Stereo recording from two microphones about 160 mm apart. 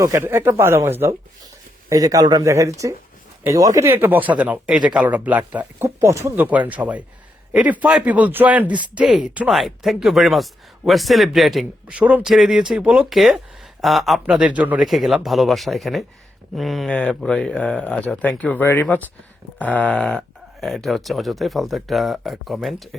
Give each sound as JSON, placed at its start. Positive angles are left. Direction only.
{"t": 0.0, "sound": "speech", "side_deg": -20}